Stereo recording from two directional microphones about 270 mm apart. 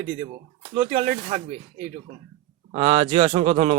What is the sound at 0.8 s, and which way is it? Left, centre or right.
Speech, right.